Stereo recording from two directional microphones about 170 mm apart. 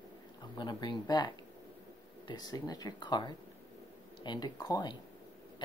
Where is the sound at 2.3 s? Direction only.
25° left (ahead or behind).